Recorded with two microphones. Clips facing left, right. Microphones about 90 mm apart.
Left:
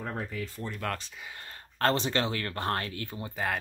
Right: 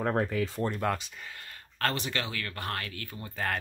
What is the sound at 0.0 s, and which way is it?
Speech, 65° right (ahead or behind).